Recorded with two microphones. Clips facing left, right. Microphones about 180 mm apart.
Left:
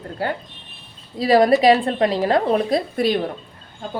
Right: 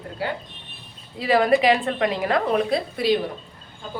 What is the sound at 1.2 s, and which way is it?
A woman's voice, 35° left (ahead or behind).